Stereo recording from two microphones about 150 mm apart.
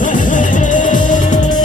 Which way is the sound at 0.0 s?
60° left (ahead or behind).